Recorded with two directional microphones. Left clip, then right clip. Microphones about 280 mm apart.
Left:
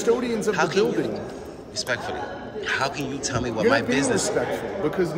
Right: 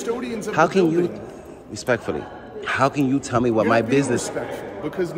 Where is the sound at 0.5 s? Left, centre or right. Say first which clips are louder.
Right 5 dB; centre.